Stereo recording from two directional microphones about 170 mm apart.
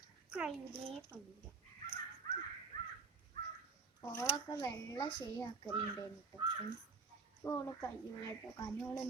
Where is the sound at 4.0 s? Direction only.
20° left (ahead or behind).